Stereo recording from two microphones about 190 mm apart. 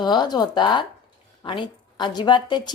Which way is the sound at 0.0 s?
25° left (ahead or behind).